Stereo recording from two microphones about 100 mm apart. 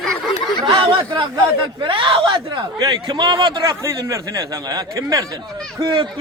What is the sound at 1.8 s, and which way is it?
Speech, 55° right (ahead or behind).